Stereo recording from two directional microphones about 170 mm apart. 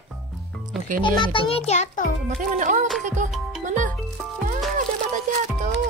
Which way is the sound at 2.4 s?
50° right (ahead or behind).